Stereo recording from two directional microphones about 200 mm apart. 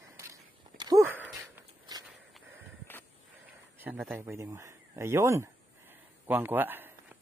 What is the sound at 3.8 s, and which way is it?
A man's voice, 5° right (ahead or behind).